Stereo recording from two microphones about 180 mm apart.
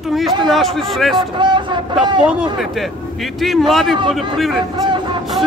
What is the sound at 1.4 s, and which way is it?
Speech, 25° right (ahead or behind).